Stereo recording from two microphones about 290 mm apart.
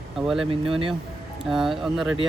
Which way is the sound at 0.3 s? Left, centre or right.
Centre.